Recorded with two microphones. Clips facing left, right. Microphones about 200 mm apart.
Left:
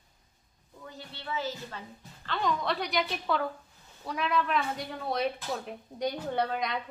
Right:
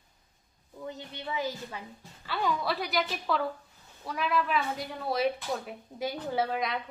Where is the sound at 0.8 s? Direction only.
20° right (ahead or behind).